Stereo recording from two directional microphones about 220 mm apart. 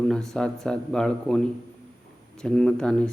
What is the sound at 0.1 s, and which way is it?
Speech, centre (ahead or behind).